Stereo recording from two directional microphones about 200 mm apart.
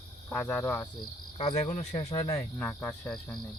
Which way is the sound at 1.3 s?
30° left (ahead or behind).